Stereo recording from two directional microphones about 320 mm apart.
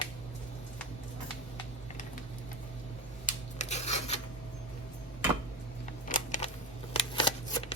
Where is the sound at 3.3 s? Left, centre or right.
Left.